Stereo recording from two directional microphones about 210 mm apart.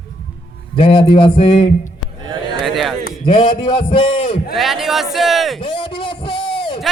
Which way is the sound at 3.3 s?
25° left (ahead or behind).